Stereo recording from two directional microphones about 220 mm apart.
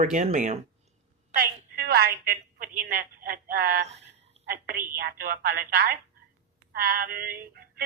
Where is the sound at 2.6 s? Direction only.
40° right (ahead or behind).